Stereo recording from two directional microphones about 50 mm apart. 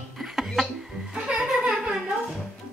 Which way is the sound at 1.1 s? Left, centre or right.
Centre.